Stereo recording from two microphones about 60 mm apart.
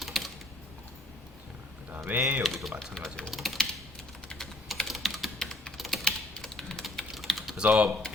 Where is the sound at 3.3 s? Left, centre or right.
Centre.